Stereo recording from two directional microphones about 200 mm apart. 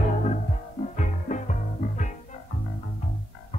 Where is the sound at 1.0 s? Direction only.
40° left (ahead or behind).